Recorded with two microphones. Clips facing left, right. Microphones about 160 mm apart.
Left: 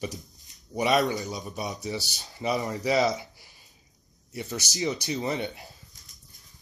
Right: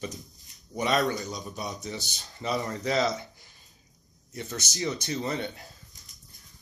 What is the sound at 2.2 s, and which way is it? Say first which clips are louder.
Speech: left 3 dB; 20° left (ahead or behind).